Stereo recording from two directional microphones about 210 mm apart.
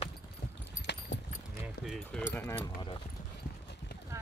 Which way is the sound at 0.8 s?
55° left (ahead or behind).